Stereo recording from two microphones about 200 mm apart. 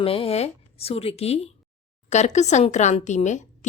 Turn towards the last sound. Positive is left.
turn(degrees=35)  # may be behind; listen again after turning